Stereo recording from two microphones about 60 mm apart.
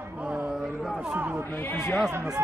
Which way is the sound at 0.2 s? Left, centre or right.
Right.